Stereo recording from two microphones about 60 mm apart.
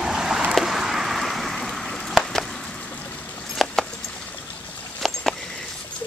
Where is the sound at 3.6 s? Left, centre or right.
Centre.